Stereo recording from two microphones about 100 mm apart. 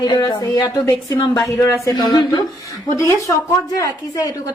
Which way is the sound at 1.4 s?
30° left (ahead or behind).